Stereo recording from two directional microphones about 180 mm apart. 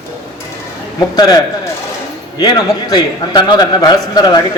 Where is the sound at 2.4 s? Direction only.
20° left (ahead or behind).